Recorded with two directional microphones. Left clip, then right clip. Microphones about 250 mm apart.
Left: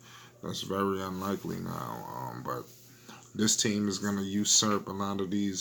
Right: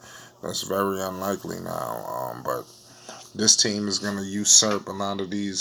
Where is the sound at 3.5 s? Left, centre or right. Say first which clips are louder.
Right 7 dB; centre.